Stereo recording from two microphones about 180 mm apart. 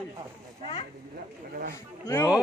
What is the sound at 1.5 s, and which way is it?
Speech, 55° right (ahead or behind).